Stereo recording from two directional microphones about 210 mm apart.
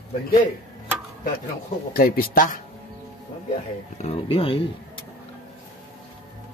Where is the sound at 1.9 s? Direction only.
45° left (ahead or behind).